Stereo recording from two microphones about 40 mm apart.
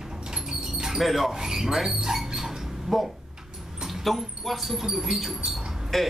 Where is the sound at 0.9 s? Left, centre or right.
Centre.